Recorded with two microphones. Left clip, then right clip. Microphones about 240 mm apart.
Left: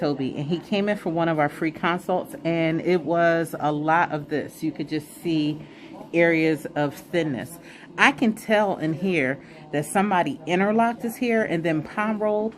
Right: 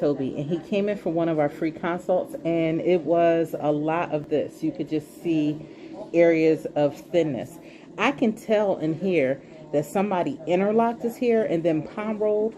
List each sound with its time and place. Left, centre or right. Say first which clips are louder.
0.2 s speech: even; left